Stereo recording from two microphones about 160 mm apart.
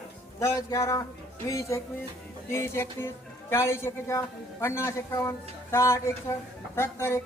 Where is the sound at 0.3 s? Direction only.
20° left (ahead or behind).